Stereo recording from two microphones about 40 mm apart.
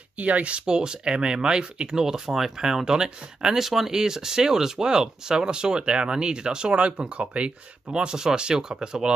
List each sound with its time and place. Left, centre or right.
0.2 s speech: right
7.9 s speech: centre